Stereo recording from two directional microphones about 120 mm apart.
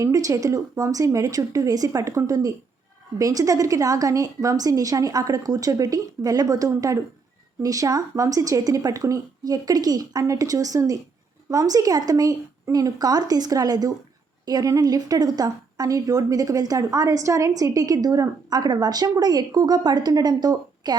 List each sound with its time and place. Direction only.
0.0 s a woman's voice: 25° right (ahead or behind)